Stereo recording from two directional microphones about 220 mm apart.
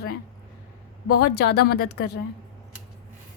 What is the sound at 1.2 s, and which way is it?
A woman's voice, 50° left (ahead or behind).